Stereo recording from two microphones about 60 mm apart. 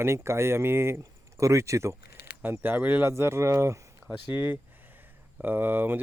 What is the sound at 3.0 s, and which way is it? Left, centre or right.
Speech, right.